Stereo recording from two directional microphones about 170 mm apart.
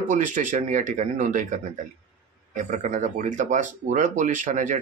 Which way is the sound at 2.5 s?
50° right (ahead or behind).